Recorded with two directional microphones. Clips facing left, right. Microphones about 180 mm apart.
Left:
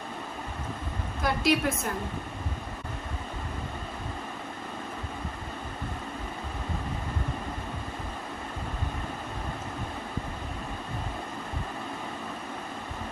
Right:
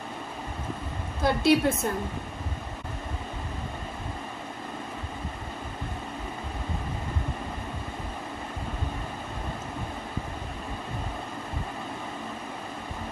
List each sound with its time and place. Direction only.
1.2 s a woman's voice: 30° right (ahead or behind)